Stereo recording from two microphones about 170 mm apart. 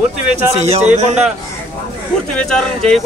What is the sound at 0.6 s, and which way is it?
Speech, 40° right (ahead or behind).